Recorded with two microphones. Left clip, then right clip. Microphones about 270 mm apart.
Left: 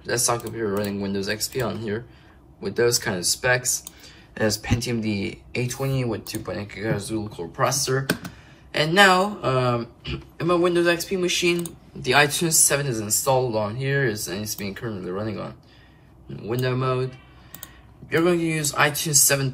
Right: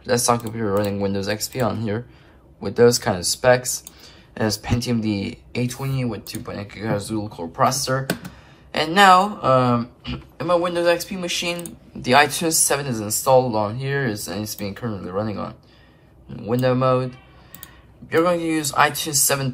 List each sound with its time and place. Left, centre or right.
0.0 s speech: right
18.1 s speech: centre